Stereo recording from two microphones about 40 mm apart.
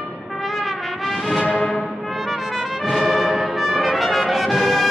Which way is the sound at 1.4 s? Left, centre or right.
Left.